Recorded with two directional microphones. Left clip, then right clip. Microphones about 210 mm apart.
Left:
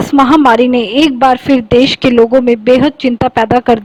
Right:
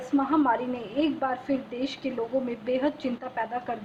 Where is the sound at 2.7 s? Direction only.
40° left (ahead or behind).